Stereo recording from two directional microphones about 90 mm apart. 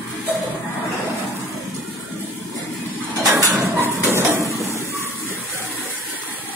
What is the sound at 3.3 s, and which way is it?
Dishes, 35° right (ahead or behind).